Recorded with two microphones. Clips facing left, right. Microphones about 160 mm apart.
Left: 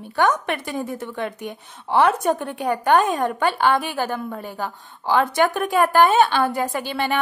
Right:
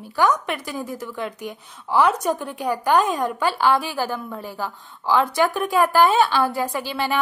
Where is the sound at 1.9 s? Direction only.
60° left (ahead or behind).